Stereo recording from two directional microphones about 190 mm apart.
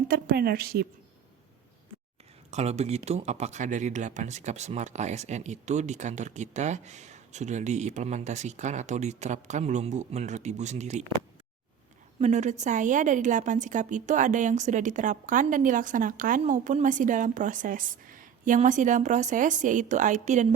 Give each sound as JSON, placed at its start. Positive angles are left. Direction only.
{"t": 0.1, "sound": "a woman's voice", "side_deg": -50}
{"t": 2.5, "sound": "speech", "side_deg": -35}
{"t": 12.2, "sound": "speech", "side_deg": -40}